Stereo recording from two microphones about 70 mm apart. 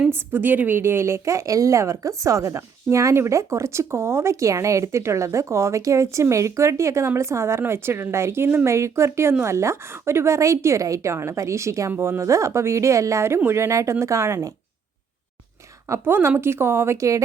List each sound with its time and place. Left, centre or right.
0.1 s speech: right
0.8 s a woman's voice: right
15.9 s speech: right